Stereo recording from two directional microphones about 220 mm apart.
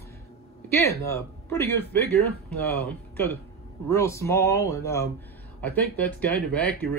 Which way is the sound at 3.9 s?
15° left (ahead or behind).